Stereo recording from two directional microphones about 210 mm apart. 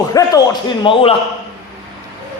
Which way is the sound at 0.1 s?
15° left (ahead or behind).